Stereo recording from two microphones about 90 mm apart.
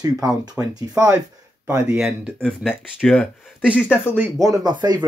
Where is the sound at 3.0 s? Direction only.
5° left (ahead or behind).